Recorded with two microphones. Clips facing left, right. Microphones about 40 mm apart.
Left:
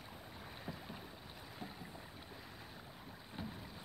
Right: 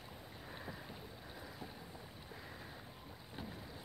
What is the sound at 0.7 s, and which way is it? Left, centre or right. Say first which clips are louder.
Boat: left 1 dB; left.